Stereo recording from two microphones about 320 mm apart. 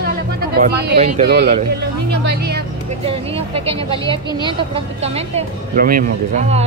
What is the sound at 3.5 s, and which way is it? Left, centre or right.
Speech, centre.